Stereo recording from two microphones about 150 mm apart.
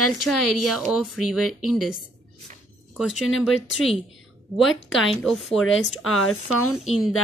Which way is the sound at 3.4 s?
Centre (ahead or behind).